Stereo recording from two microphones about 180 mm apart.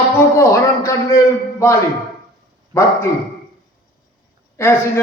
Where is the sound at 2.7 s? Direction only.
15° left (ahead or behind).